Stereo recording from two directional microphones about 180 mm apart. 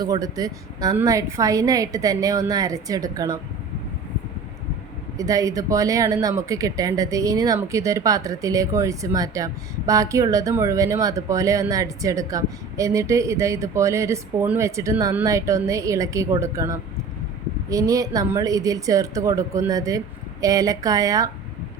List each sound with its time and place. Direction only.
0.0 s a woman's voice: 20° right (ahead or behind)
5.1 s a woman's voice: 20° right (ahead or behind)